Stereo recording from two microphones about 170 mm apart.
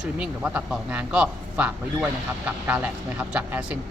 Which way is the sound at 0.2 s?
5° right (ahead or behind).